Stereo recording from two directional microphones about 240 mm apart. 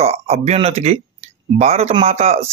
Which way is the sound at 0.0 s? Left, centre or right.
Right.